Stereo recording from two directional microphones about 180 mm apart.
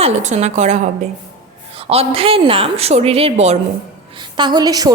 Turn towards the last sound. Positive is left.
turn(degrees=-20)  # may be behind; listen again after turning